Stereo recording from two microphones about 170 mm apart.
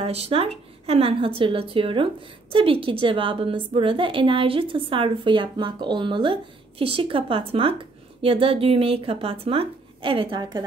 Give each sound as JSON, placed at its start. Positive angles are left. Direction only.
{"t": 0.0, "sound": "a woman's voice", "side_deg": -35}